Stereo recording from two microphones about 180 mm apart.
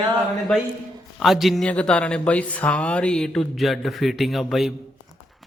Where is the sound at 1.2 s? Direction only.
Centre (ahead or behind).